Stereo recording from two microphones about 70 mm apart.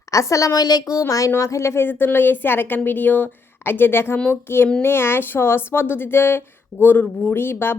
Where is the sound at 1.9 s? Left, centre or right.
Left.